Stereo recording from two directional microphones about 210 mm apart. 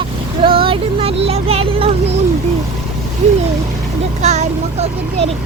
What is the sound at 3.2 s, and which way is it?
Vehicle, 35° right (ahead or behind).